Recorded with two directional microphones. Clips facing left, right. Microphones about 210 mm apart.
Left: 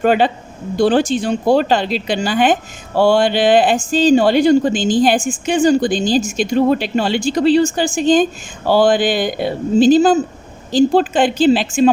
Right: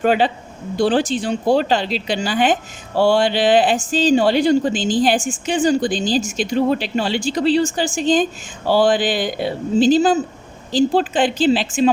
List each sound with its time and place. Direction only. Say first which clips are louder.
0.0 s a woman's voice: left 2 dB; 50° left (ahead or behind)